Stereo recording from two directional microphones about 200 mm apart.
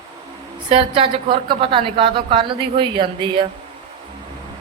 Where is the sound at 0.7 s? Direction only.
25° right (ahead or behind).